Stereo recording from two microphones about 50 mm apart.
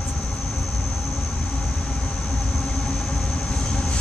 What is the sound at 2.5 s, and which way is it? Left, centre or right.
Train, centre.